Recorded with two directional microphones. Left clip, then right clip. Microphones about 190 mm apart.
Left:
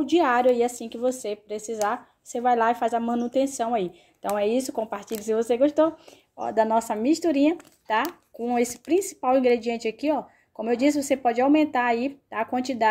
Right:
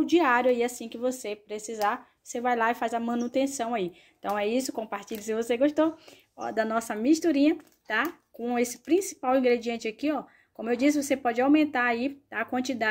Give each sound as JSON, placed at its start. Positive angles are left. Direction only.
{"t": 0.0, "sound": "a woman's voice", "side_deg": 0}